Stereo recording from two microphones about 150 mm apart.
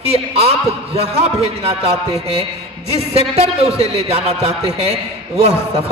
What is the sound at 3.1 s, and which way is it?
A man's voice, 40° right (ahead or behind).